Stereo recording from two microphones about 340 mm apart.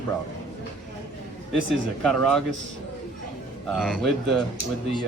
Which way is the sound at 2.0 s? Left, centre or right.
Centre.